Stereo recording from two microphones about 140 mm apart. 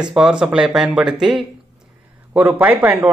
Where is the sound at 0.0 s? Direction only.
5° right (ahead or behind).